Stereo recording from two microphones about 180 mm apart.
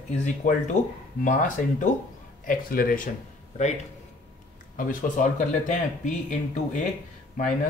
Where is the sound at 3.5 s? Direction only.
40° left (ahead or behind).